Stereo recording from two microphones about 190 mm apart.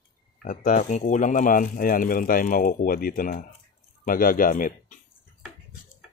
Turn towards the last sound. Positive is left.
turn(degrees=45)  # may be behind; listen again after turning